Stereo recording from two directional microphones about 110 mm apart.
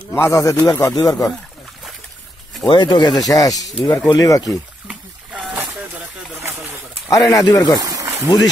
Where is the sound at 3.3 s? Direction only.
35° left (ahead or behind).